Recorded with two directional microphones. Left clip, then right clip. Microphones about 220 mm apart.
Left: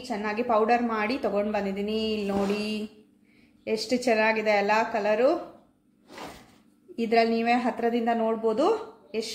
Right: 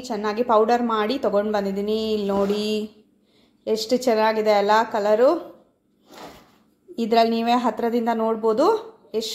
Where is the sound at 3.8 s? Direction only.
25° right (ahead or behind).